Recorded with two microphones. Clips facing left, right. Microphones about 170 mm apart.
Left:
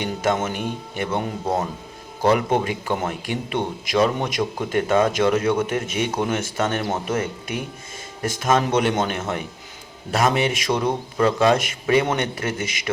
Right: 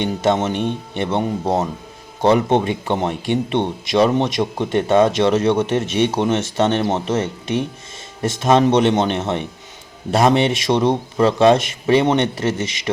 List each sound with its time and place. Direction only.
0.0 s speech: 25° right (ahead or behind)